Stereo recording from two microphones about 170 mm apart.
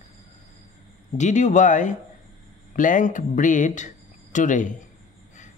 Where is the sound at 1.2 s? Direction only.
45° left (ahead or behind).